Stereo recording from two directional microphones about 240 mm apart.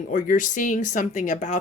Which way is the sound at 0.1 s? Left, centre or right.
Left.